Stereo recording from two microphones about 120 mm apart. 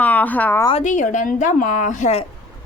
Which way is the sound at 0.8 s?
90° left.